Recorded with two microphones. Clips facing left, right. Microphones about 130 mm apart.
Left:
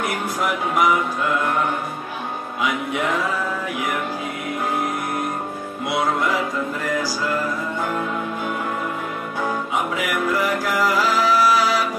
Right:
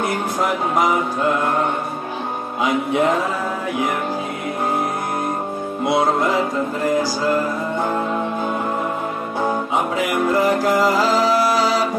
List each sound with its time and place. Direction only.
0.0 s music: 30° right (ahead or behind)
2.6 s music: 30° right (ahead or behind)
5.9 s music: 30° right (ahead or behind)
9.4 s music: 30° right (ahead or behind)